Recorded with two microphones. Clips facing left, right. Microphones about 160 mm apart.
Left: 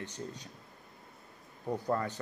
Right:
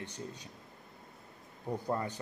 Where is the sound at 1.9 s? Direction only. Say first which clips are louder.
Left 3 dB; 15° right (ahead or behind).